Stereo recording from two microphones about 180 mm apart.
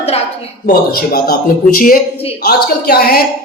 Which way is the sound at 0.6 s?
55° left (ahead or behind).